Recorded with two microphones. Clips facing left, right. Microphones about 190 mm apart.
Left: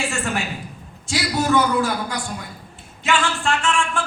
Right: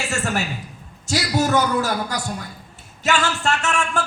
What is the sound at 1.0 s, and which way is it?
Speech, 40° right (ahead or behind).